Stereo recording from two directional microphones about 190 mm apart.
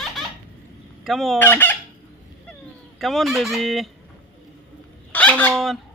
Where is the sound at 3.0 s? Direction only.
Centre (ahead or behind).